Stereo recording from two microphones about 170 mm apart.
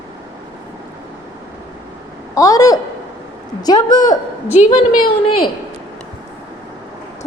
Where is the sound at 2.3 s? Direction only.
20° left (ahead or behind).